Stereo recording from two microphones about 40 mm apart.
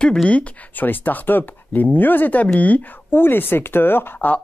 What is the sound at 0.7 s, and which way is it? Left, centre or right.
Speech, left.